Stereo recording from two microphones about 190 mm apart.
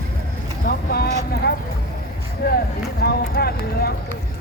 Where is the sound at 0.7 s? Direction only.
55° left (ahead or behind).